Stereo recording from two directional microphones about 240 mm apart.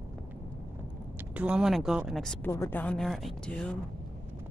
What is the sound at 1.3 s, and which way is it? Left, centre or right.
Speech, centre.